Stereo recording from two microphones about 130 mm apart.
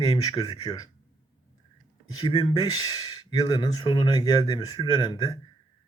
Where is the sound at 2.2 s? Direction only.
40° left (ahead or behind).